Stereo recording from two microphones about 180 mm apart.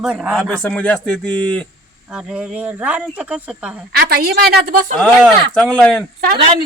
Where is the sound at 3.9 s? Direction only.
60° right (ahead or behind).